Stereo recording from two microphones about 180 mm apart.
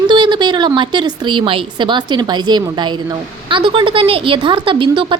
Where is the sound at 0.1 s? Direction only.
25° right (ahead or behind).